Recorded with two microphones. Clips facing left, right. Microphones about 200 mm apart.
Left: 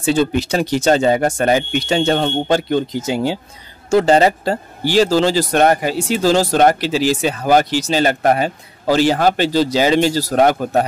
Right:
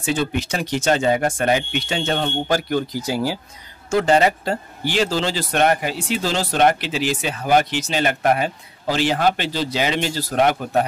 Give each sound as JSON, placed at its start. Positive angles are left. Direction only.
{"t": 0.0, "sound": "speech", "side_deg": 30}
{"t": 2.4, "sound": "speech", "side_deg": 25}
{"t": 3.9, "sound": "speech", "side_deg": 35}